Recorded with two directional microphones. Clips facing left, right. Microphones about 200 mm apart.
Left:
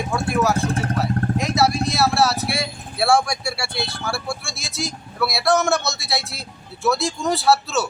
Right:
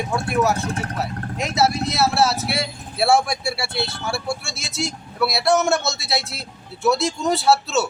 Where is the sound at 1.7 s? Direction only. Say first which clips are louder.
Left 1 dB; 25° right (ahead or behind).